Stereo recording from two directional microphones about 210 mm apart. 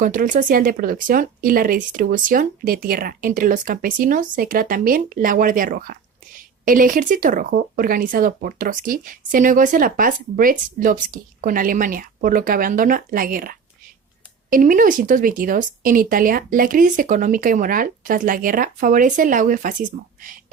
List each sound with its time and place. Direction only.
0.0 s speech: 40° right (ahead or behind)